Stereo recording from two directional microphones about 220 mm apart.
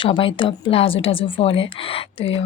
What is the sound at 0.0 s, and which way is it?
Speech, 25° left (ahead or behind).